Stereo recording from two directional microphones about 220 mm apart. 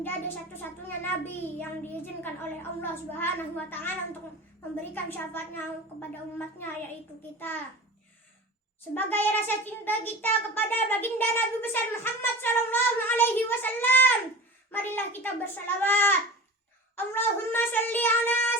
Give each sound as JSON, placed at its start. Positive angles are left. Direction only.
{"t": 0.0, "sound": "a child's voice", "side_deg": 10}
{"t": 9.0, "sound": "a child's voice", "side_deg": 10}